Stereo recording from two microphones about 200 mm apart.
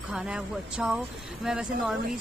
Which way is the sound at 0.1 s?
5° right (ahead or behind).